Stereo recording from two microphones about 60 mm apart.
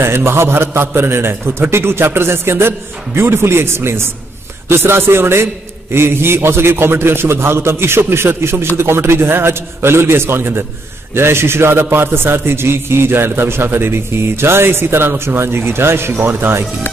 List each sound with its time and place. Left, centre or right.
0.0 s a man's voice: right